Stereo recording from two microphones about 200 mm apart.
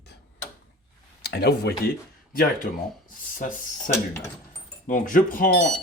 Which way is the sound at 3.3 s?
40° left (ahead or behind).